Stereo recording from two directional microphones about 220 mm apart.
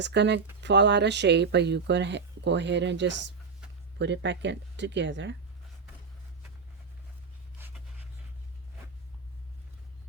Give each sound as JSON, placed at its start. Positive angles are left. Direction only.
{"t": 0.0, "sound": "speech", "side_deg": -50}